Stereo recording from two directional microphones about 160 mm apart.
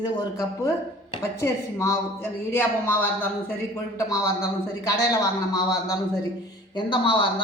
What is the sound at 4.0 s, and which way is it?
A man's voice, 20° left (ahead or behind).